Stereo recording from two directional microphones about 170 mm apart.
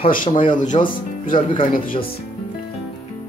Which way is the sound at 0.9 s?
55° left (ahead or behind).